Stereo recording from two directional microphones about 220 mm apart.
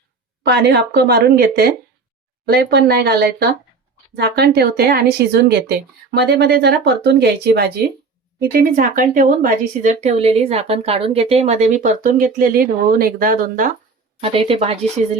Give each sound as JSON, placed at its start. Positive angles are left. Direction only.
{"t": 0.4, "sound": "speech", "side_deg": -45}
{"t": 14.2, "sound": "a woman's voice", "side_deg": -25}